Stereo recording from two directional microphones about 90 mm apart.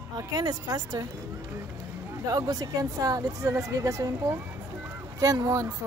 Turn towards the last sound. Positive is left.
turn(degrees=-40)  # may be behind; listen again after turning